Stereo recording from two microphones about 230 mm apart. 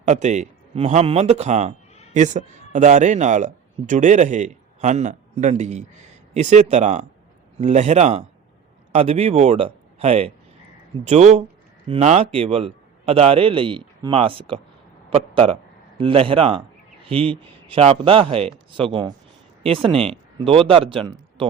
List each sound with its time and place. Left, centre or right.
0.0 s a man's voice: right